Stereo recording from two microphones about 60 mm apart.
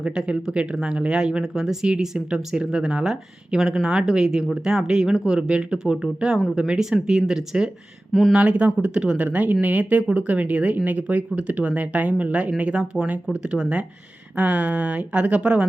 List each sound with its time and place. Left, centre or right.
0.0 s speech: centre
8.4 s speech: right